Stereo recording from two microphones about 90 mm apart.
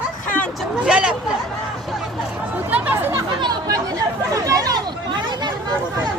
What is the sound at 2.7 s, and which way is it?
Chatter, 20° right (ahead or behind).